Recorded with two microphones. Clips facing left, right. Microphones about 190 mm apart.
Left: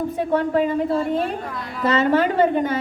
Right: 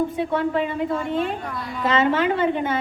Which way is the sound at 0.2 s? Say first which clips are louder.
Left 3 dB; 45° left (ahead or behind).